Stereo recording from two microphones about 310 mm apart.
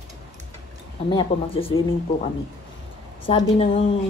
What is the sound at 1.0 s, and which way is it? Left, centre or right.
Speech, centre.